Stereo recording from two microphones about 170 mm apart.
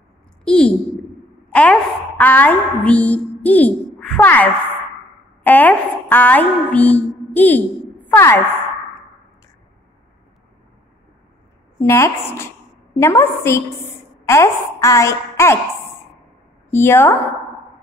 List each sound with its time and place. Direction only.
0.5 s a woman's voice: 5° left (ahead or behind)
11.8 s a woman's voice: 15° left (ahead or behind)
16.7 s a woman's voice: 15° left (ahead or behind)